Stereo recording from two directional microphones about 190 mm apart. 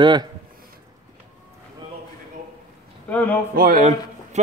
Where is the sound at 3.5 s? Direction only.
50° right (ahead or behind).